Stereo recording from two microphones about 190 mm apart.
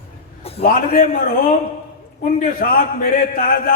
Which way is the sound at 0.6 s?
50° left (ahead or behind).